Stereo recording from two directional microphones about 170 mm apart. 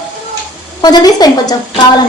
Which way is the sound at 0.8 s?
25° left (ahead or behind).